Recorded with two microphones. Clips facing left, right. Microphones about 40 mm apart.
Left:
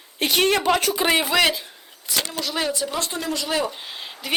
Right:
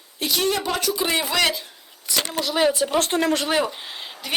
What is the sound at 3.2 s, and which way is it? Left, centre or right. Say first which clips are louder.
Speech: right 6 dB; right.